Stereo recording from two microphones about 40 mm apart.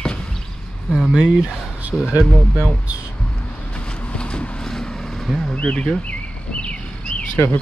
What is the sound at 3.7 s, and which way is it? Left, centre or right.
Vehicle, left.